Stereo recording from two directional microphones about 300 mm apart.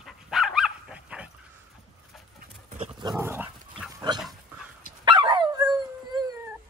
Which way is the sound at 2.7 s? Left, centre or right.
Centre.